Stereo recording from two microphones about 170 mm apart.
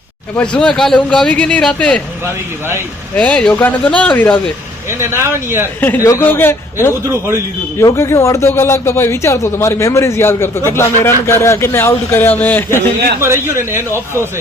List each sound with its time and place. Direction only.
0.3 s speech: 5° left (ahead or behind)
2.2 s speech: 15° right (ahead or behind)
3.2 s a man's voice: 5° left (ahead or behind)
4.9 s speech: 15° right (ahead or behind)
5.8 s a man's voice: 15° left (ahead or behind)
7.0 s speech: 15° right (ahead or behind)
7.8 s a man's voice: 15° left (ahead or behind)
13.1 s speech: 15° right (ahead or behind)